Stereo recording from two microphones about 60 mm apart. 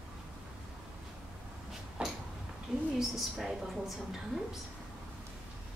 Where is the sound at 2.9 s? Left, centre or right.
Centre.